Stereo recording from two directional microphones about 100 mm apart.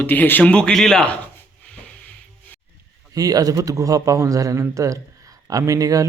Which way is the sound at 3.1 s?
40° right (ahead or behind).